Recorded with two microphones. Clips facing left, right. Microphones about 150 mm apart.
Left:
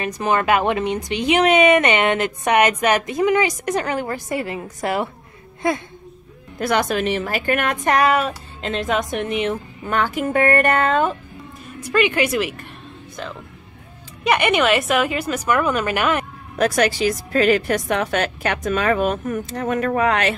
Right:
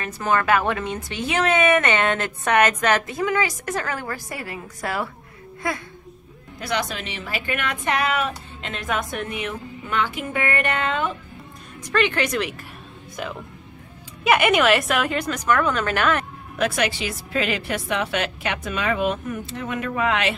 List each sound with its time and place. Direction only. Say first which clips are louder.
0.0 s a woman's voice: left 3 dB; 20° left (ahead or behind)
6.6 s a woman's voice: left 7 dB; 50° left (ahead or behind); by 9.6 s 25° left (ahead or behind)
9.8 s a woman's voice: left 5 dB; 45° left (ahead or behind)
11.8 s a woman's voice: left 3 dB; 10° left (ahead or behind)
13.2 s a woman's voice: right 1 dB; 10° right (ahead or behind); by 16.3 s 10° left (ahead or behind)
16.5 s a woman's voice: left 5 dB; 40° left (ahead or behind)